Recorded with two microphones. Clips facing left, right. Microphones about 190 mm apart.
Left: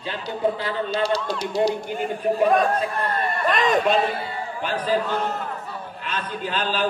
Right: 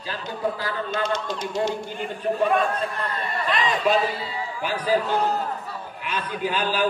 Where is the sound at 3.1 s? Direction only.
50° left (ahead or behind).